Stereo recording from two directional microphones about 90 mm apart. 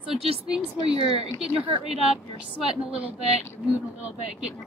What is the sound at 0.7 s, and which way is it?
Speech, 60° left (ahead or behind).